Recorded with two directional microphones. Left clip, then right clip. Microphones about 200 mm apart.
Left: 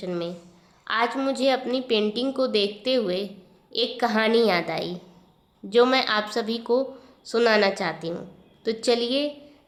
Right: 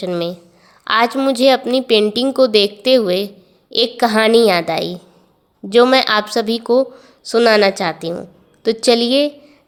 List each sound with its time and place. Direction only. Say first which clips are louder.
0.0 s a woman's voice: right 10 dB; 45° right (ahead or behind)